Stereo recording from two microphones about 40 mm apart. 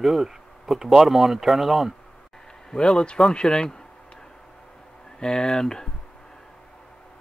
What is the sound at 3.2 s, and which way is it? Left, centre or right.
Speech, centre.